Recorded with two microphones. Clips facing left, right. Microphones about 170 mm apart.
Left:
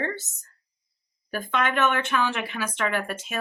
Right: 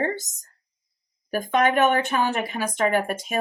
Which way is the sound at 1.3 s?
45° right (ahead or behind).